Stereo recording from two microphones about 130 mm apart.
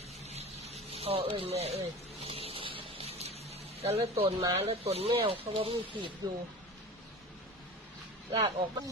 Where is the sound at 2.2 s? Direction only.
50° right (ahead or behind).